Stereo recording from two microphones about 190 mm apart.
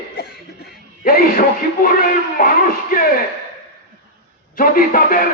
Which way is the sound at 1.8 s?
50° left (ahead or behind).